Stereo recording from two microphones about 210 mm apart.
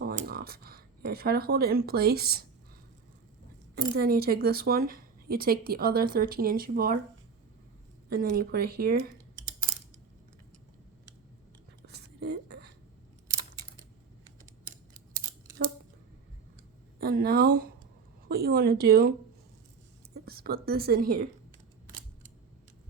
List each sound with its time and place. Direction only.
0.0 s speech: 45° right (ahead or behind)
3.9 s speech: 45° right (ahead or behind)
8.1 s speech: 45° right (ahead or behind)
11.9 s a sound: 50° right (ahead or behind)
17.0 s speech: 45° right (ahead or behind)
20.2 s speech: 45° right (ahead or behind)